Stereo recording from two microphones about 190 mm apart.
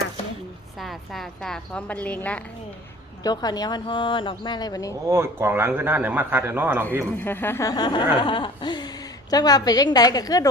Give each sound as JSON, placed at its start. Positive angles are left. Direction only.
{"t": 0.8, "sound": "a woman's voice", "side_deg": 0}
{"t": 3.2, "sound": "speech", "side_deg": 20}
{"t": 5.0, "sound": "a man's voice", "side_deg": -15}
{"t": 7.2, "sound": "speech", "side_deg": 10}